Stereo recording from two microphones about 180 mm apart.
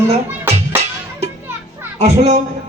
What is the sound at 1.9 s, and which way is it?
Speech, 35° right (ahead or behind).